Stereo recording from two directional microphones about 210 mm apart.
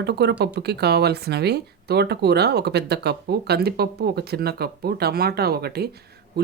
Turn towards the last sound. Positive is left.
turn(degrees=-50)  # may be behind; listen again after turning